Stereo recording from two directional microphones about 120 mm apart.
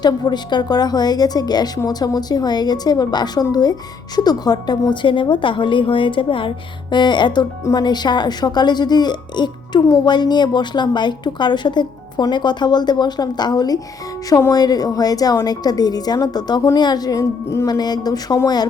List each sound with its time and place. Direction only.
0.0 s speech: 35° left (ahead or behind)